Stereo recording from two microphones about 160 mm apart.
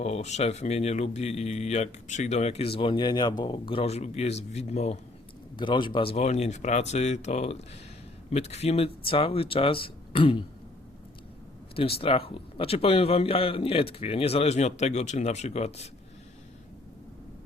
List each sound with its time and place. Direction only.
0.0 s speech: 45° left (ahead or behind)
5.5 s speech: 30° left (ahead or behind)
11.8 s speech: 35° left (ahead or behind)